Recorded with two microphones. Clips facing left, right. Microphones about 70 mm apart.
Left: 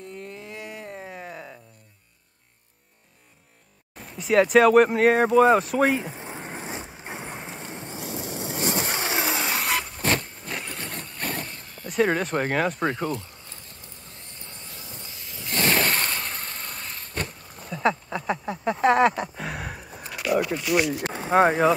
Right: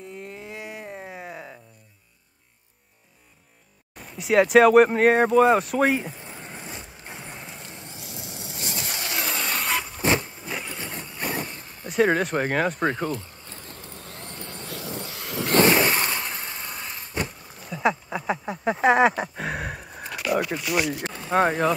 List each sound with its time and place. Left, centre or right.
0.1 s a sound: centre
3.9 s speech: centre
6.1 s a sound: left
6.4 s vehicle: left; by 9.6 s centre
9.6 s vehicle: centre; by 11.9 s right
12.0 s speech: centre
12.8 s speech: right
13.2 s vehicle: right
15.6 s vehicle: centre
17.6 s a sound: centre
21.3 s speech: centre